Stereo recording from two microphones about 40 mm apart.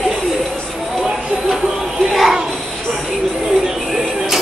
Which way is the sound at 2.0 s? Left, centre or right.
Centre.